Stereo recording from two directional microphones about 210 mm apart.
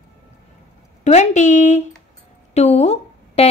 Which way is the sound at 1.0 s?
35° left (ahead or behind).